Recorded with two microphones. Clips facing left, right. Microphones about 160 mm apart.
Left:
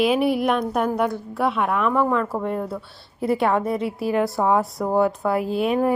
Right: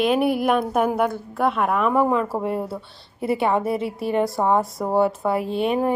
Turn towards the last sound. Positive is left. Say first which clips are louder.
# left 1 dB
turn(degrees=0)  # may be behind; listen again after turning